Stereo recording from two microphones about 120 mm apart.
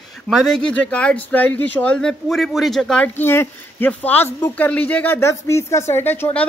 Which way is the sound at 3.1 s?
15° left (ahead or behind).